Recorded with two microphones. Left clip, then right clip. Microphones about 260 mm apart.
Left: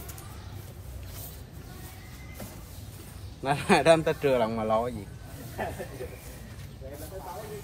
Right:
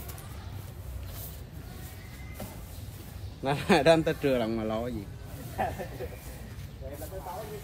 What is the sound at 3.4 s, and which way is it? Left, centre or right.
Speech, left.